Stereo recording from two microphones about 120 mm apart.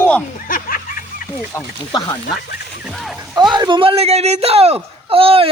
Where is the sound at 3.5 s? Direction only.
40° right (ahead or behind).